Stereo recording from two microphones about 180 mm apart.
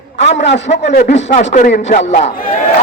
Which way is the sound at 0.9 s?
40° left (ahead or behind).